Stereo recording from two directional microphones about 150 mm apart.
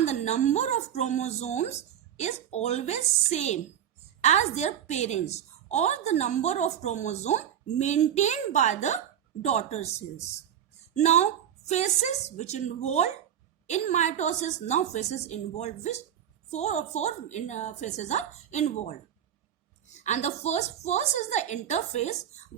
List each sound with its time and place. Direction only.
0.0 s a woman's voice: 50° left (ahead or behind)